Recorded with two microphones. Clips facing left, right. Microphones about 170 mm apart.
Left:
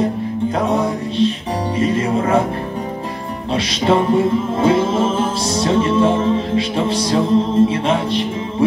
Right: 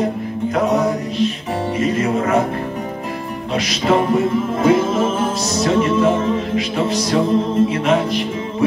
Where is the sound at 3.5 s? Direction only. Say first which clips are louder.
Left 1 dB; 30° left (ahead or behind).